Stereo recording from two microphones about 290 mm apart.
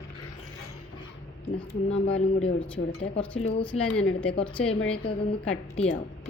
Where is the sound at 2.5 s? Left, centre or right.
Centre.